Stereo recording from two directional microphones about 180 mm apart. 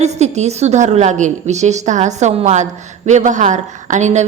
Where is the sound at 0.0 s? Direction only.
40° right (ahead or behind).